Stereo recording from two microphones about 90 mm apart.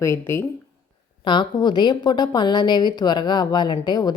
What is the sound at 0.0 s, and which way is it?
Speech, 30° left (ahead or behind).